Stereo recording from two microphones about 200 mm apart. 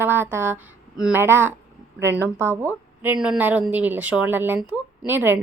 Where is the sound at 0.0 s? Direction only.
10° right (ahead or behind).